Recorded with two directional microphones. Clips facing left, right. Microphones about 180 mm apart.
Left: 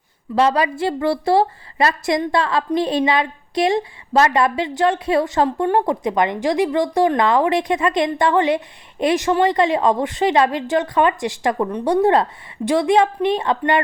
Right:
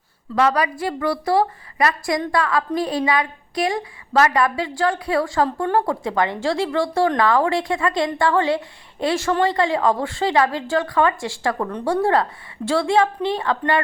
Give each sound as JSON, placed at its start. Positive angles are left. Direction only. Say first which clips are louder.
{"t": 0.3, "sound": "a woman's voice", "louder": "left 2 dB", "side_deg": 25}